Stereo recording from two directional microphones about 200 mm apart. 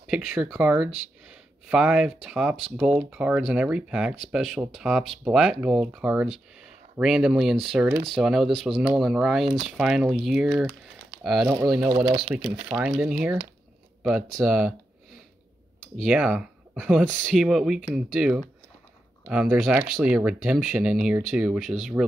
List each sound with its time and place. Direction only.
0.0 s speech: 5° right (ahead or behind)
11.4 s speech: 15° right (ahead or behind)
14.4 s speech: 5° right (ahead or behind)
16.0 s speech: 5° right (ahead or behind)